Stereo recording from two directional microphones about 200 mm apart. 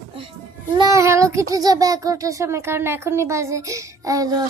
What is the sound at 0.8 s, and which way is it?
Child singing, 15° right (ahead or behind).